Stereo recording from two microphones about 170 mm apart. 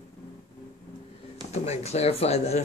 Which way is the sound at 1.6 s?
40° left (ahead or behind).